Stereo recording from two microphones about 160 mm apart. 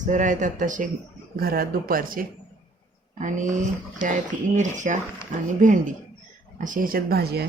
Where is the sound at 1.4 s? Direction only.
70° right (ahead or behind).